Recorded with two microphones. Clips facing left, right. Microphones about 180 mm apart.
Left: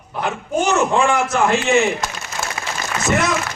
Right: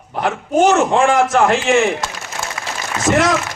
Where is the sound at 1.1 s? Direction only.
90° right.